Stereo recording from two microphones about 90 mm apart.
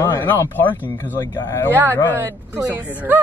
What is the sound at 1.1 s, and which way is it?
Speech, 45° left (ahead or behind).